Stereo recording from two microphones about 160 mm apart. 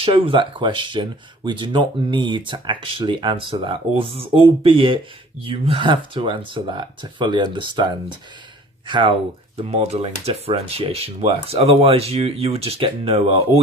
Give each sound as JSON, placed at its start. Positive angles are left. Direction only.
{"t": 0.0, "sound": "speech", "side_deg": -35}
{"t": 8.9, "sound": "speech", "side_deg": -30}